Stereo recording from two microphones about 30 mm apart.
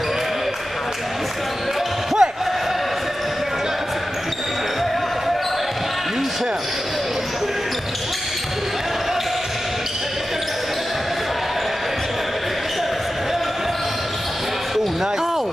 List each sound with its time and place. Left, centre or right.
2.2 s basketball bounce: right